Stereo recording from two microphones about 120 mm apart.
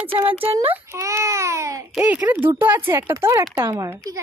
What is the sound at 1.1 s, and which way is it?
Babbling, 25° right (ahead or behind).